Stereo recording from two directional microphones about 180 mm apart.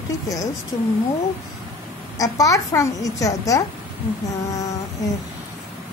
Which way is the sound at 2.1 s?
20° left (ahead or behind).